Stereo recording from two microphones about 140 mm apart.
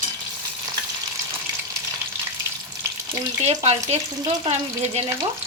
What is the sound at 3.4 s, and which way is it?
Speech, 50° right (ahead or behind).